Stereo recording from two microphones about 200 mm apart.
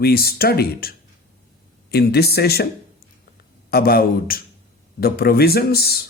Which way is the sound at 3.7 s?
50° left (ahead or behind).